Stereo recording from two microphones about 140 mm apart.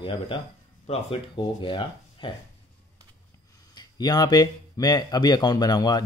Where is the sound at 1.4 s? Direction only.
35° left (ahead or behind).